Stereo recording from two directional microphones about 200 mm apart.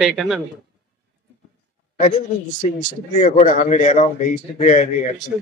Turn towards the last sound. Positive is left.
turn(degrees=35)  # may be behind; listen again after turning